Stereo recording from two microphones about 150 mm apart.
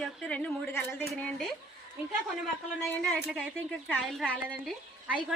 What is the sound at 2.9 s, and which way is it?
A woman's voice, 5° left (ahead or behind).